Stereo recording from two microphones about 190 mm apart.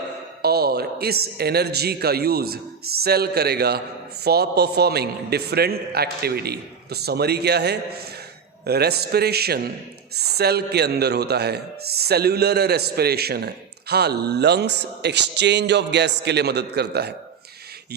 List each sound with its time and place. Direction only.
0.4 s speech: 55° right (ahead or behind)